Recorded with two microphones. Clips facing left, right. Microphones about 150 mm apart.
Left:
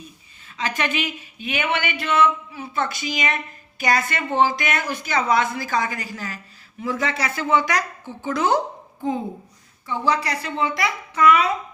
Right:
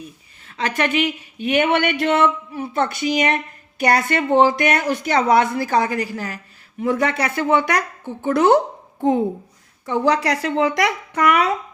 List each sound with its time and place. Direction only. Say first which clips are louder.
0.4 s a woman's voice: right 4 dB; 55° right (ahead or behind)
9.8 s speech: right 5 dB; 75° right (ahead or behind)